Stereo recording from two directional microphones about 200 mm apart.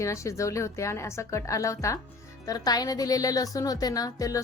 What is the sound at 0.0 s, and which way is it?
A woman's voice, 15° left (ahead or behind).